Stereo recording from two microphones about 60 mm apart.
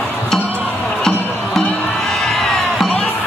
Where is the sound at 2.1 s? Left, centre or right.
Centre.